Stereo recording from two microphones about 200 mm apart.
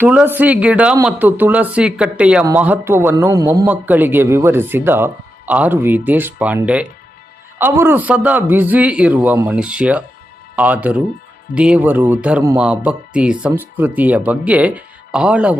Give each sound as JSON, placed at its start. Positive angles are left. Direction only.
{"t": 0.0, "sound": "a man's voice", "side_deg": -10}